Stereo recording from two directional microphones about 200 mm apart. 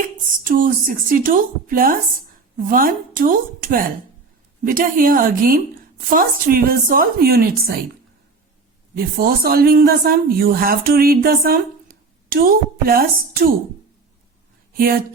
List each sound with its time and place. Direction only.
0.3 s speech: 45° right (ahead or behind)
9.0 s speech: 50° right (ahead or behind)
14.7 s speech: 45° right (ahead or behind)